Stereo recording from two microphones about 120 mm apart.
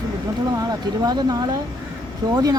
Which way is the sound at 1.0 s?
35° right (ahead or behind).